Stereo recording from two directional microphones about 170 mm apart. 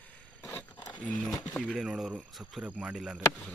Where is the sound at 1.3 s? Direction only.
5° left (ahead or behind).